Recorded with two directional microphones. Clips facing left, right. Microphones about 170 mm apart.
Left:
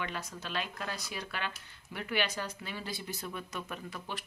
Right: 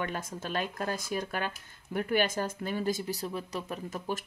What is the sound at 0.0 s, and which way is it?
Speech, 45° right (ahead or behind).